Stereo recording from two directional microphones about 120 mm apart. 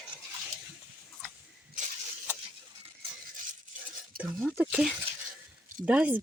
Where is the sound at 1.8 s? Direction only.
90° right.